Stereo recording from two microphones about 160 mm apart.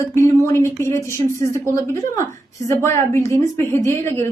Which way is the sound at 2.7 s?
15° left (ahead or behind).